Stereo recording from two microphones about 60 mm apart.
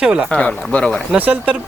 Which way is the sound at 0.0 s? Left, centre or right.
Centre.